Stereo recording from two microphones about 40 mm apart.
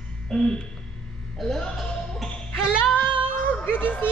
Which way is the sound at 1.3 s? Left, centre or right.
Centre.